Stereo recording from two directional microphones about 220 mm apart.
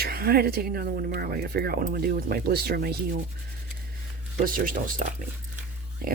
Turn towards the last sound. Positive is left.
turn(degrees=-40)  # may be behind; listen again after turning